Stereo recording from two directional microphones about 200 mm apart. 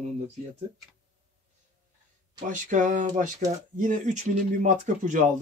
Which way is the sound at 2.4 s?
40° right (ahead or behind).